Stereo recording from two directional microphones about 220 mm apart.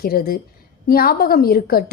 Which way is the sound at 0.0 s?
45° left (ahead or behind).